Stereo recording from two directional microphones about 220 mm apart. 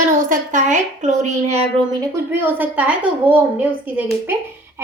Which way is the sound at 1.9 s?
10° right (ahead or behind).